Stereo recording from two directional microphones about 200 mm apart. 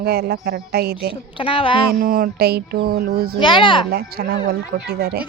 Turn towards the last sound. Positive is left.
turn(degrees=-55)  # may be behind; listen again after turning